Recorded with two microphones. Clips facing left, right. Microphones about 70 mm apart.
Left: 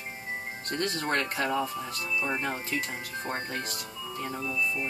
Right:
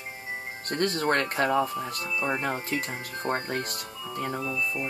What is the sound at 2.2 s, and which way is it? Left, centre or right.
Speech, centre.